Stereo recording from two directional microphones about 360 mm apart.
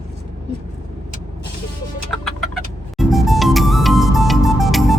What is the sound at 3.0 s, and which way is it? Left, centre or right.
Music, centre.